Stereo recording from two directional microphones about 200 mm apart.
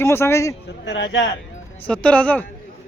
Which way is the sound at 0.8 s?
60° left (ahead or behind).